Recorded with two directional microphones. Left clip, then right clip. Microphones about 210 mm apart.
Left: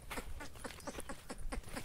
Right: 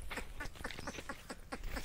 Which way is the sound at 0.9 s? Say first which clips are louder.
Right 2 dB; 5° left (ahead or behind).